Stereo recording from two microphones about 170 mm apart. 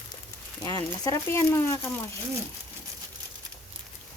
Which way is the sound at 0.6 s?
20° left (ahead or behind).